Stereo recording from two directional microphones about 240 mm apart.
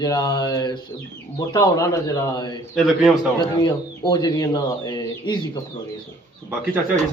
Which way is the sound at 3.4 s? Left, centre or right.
Centre.